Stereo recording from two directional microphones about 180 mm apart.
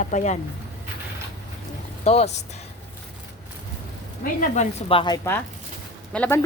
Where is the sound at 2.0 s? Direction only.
35° left (ahead or behind).